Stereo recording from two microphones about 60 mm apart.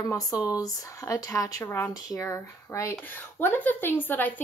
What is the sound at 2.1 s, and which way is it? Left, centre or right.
Speech, left.